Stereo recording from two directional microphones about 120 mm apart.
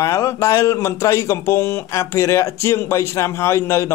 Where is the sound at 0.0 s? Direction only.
25° left (ahead or behind).